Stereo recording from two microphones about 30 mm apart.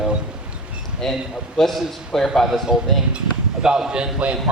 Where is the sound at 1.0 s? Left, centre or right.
Centre.